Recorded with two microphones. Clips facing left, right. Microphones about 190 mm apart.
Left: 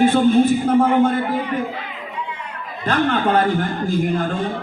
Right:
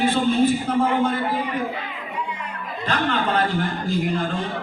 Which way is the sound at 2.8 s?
50° left (ahead or behind).